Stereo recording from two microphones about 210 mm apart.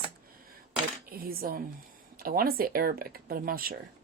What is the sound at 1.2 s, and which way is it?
Speech, 45° right (ahead or behind).